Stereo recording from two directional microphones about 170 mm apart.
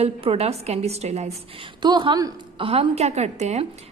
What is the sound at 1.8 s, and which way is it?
A woman's voice, 25° right (ahead or behind).